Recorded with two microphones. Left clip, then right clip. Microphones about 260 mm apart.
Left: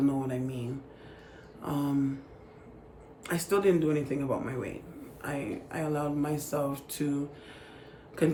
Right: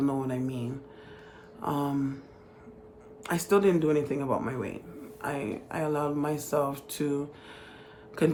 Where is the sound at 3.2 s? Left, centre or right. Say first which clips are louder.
Right 3 dB; centre.